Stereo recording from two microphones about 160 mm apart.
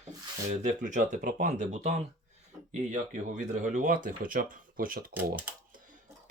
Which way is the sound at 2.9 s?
50° right (ahead or behind).